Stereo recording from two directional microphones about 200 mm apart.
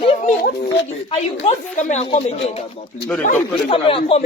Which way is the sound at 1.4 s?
35° left (ahead or behind).